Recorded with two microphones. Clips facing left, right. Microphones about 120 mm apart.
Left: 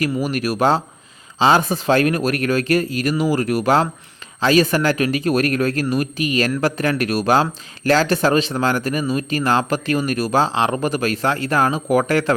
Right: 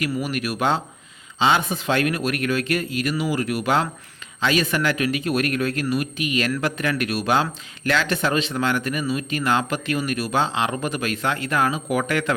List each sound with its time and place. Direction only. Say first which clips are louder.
0.0 s speech: left 4 dB; 40° left (ahead or behind)